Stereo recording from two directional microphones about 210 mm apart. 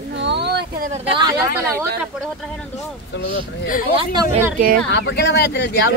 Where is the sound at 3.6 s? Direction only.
40° left (ahead or behind).